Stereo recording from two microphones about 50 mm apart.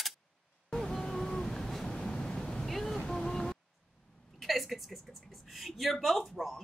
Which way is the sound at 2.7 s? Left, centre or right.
Centre.